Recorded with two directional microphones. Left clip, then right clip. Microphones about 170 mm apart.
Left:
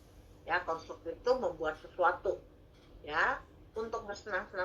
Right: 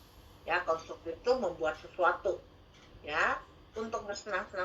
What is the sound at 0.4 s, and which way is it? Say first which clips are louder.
A woman's voice: right 2 dB; 40° right (ahead or behind).